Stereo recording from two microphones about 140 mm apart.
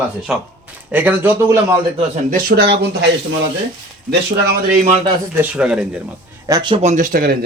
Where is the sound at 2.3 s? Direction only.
90° right.